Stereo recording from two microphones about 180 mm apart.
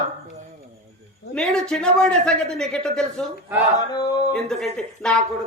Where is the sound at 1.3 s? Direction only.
5° left (ahead or behind).